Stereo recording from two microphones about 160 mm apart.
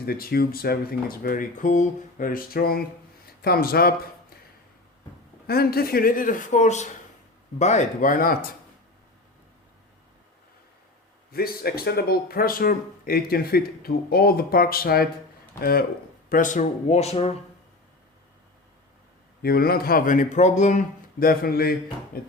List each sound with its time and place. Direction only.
0.0 s speech: 70° left (ahead or behind)
5.5 s speech: 70° left (ahead or behind)
11.3 s speech: 70° left (ahead or behind)
16.3 s speech: 55° left (ahead or behind)
19.4 s speech: 70° left (ahead or behind)